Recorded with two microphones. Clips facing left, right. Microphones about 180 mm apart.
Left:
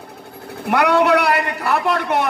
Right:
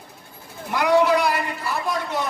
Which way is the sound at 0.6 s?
65° left (ahead or behind).